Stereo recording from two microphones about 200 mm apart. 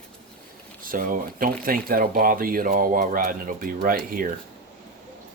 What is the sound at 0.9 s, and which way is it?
Speech, 45° right (ahead or behind).